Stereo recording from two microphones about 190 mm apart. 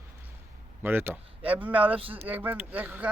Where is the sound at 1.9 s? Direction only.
30° right (ahead or behind).